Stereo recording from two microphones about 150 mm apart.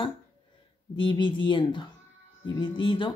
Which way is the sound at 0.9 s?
30° left (ahead or behind).